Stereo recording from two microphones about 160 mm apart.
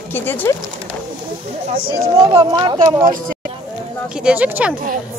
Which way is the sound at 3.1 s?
60° right (ahead or behind).